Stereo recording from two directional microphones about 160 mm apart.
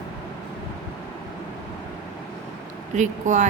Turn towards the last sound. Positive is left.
turn(degrees=-50)  # may be behind; listen again after turning